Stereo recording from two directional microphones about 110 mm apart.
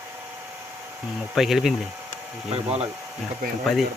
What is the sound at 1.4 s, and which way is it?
Speech, centre (ahead or behind).